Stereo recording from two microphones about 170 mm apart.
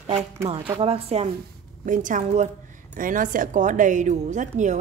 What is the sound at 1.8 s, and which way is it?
A woman's voice, 50° right (ahead or behind).